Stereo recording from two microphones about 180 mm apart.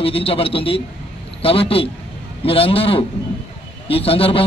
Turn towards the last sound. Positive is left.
turn(degrees=30)  # may be behind; listen again after turning